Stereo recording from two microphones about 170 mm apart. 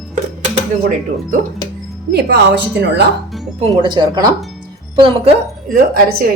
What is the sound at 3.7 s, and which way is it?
Speech, 25° right (ahead or behind).